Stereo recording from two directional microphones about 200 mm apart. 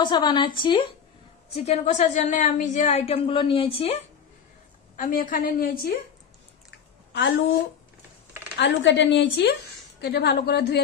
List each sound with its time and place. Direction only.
0.0 s a woman's voice: 20° left (ahead or behind)
4.9 s a woman's voice: 45° left (ahead or behind)
7.1 s a woman's voice: 65° left (ahead or behind)
8.5 s a woman's voice: 60° left (ahead or behind)